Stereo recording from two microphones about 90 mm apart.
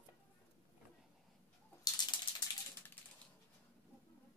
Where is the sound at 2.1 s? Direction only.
60° left (ahead or behind).